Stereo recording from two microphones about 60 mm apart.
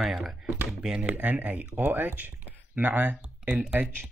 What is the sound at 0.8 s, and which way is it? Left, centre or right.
Speech, centre.